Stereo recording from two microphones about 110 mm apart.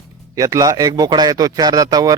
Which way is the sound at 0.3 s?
30° right (ahead or behind).